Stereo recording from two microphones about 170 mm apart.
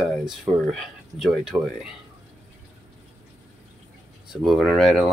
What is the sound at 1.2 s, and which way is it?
Speech, 5° right (ahead or behind).